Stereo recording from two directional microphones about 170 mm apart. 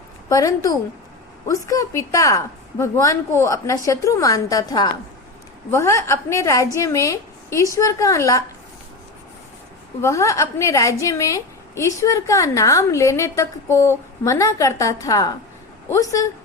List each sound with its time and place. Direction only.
0.3 s a woman's voice: 20° left (ahead or behind)
10.0 s a woman's voice: 15° left (ahead or behind)